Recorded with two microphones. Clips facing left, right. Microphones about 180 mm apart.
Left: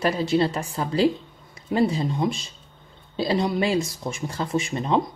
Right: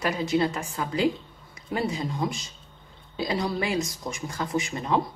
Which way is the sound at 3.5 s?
25° left (ahead or behind).